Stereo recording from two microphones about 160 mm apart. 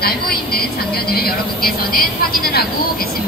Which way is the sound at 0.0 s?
70° left (ahead or behind).